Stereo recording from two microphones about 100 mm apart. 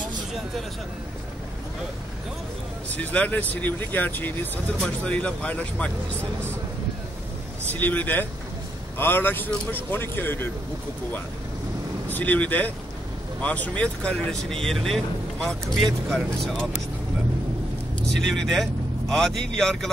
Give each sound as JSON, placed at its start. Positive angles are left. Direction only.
{"t": 3.0, "sound": "speech", "side_deg": 15}
{"t": 7.7, "sound": "speech", "side_deg": 15}
{"t": 12.1, "sound": "speech", "side_deg": 15}
{"t": 18.3, "sound": "speech", "side_deg": 5}